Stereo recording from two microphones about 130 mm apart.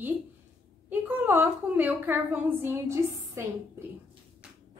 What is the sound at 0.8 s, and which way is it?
A woman's voice, 15° right (ahead or behind).